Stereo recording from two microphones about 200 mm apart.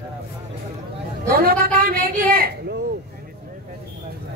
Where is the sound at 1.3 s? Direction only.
50° right (ahead or behind).